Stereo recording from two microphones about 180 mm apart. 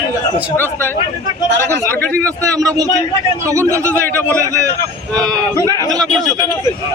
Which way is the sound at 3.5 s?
15° right (ahead or behind).